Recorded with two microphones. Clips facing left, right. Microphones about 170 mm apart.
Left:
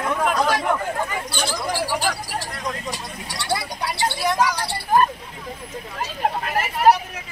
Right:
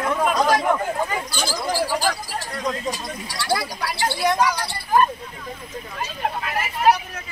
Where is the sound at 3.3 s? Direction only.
20° left (ahead or behind).